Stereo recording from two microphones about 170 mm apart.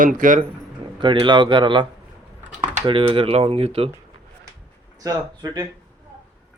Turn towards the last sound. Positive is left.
turn(degrees=-25)  # may be behind; listen again after turning